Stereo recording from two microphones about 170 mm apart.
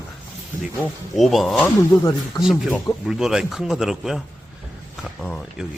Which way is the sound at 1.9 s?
20° left (ahead or behind).